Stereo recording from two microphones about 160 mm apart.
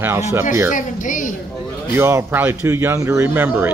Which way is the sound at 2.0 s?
15° right (ahead or behind).